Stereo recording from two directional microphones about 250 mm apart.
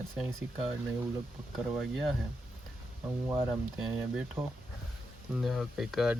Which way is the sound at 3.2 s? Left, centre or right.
Centre.